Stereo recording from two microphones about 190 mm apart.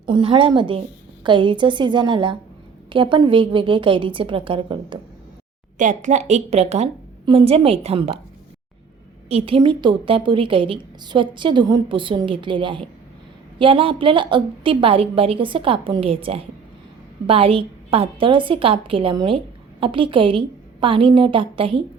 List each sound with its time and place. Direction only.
0.0 s a woman's voice: 25° right (ahead or behind)
5.7 s a woman's voice: 40° right (ahead or behind)
9.3 s a woman's voice: 30° right (ahead or behind)